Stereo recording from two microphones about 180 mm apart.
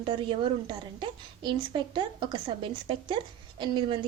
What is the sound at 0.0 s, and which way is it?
A woman's voice, 25° right (ahead or behind).